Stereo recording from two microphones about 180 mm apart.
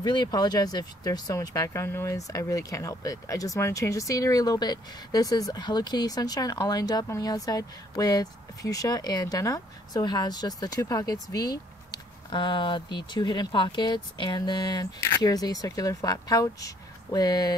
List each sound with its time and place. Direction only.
0.0 s speech: 25° left (ahead or behind)